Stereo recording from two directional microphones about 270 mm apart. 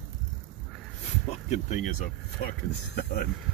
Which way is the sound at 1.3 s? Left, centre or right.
Left.